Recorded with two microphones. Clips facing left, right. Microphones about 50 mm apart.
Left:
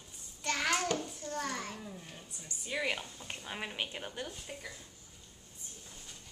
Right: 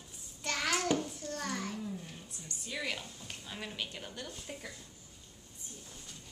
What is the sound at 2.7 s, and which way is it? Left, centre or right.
Speech, centre.